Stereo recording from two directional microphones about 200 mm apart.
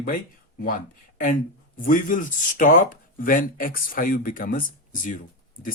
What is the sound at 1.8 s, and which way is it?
Speech, 45° left (ahead or behind).